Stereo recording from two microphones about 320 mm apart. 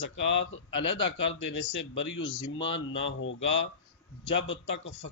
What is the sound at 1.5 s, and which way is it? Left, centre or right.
Speech, left.